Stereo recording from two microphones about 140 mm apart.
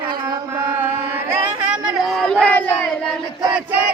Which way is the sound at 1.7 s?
5° right (ahead or behind).